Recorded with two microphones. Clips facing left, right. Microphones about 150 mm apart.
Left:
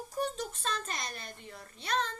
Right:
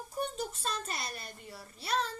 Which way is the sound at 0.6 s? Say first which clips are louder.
Left 4 dB; 35° right (ahead or behind).